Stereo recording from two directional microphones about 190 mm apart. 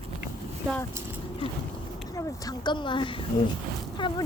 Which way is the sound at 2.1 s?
20° left (ahead or behind).